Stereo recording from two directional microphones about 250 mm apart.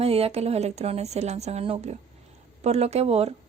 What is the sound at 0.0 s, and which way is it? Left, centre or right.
Speech, right.